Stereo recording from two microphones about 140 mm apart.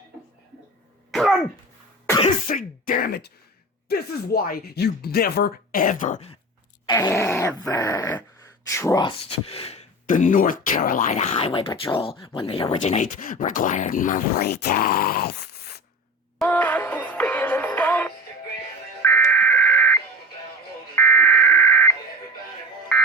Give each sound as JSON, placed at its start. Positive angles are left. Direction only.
{"t": 1.1, "sound": "cough", "side_deg": 0}
{"t": 2.5, "sound": "speech", "side_deg": 80}
{"t": 6.9, "sound": "dog", "side_deg": 20}
{"t": 9.0, "sound": "speech", "side_deg": 40}
{"t": 10.1, "sound": "speech", "side_deg": 65}
{"t": 12.8, "sound": "speech", "side_deg": 60}
{"t": 16.4, "sound": "music", "side_deg": 10}
{"t": 20.9, "sound": "fire alarm", "side_deg": 15}